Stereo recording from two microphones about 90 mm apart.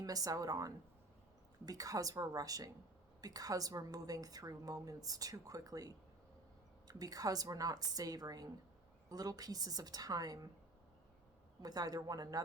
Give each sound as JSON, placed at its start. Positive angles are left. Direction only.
{"t": 0.0, "sound": "a woman's voice", "side_deg": -40}
{"t": 11.6, "sound": "a woman's voice", "side_deg": -45}